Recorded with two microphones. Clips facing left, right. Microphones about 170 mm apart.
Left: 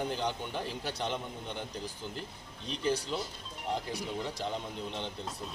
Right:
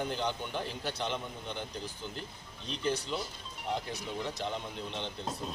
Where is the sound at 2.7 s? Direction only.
5° left (ahead or behind).